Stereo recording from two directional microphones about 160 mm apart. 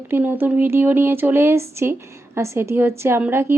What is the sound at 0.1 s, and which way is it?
Speech, 10° right (ahead or behind).